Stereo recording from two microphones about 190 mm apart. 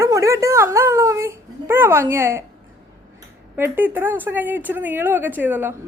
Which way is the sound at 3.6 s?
10° right (ahead or behind).